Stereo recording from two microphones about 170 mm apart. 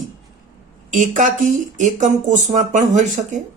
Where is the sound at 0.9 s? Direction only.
50° right (ahead or behind).